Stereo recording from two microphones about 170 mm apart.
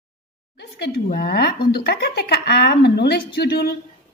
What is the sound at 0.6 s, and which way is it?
Speech, 75° left (ahead or behind).